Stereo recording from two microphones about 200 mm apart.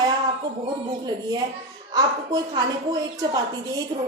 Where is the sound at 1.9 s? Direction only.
20° right (ahead or behind).